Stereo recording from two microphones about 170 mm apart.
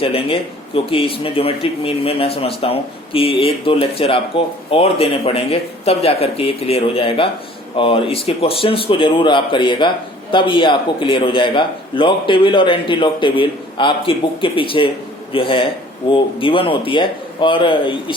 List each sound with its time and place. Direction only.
0.0 s speech: 35° left (ahead or behind)